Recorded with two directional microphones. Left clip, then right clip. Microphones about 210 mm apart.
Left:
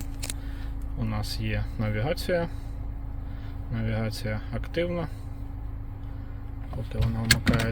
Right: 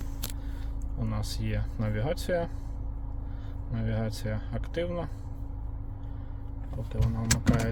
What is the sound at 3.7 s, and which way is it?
Speech, 10° left (ahead or behind).